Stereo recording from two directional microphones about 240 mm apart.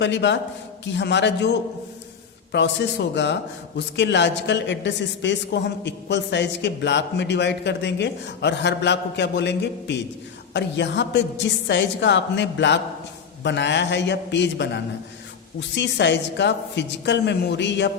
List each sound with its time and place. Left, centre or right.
0.0 s speech: left